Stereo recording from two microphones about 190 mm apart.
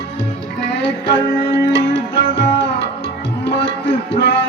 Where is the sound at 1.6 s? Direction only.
70° left (ahead or behind).